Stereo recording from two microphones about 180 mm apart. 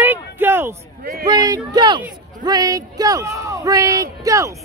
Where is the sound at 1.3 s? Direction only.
20° right (ahead or behind).